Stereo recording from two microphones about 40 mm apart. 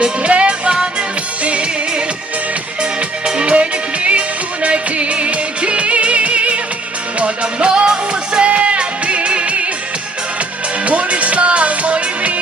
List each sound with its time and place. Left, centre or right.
0.0 s music: right
3.2 s music: right
10.8 s music: right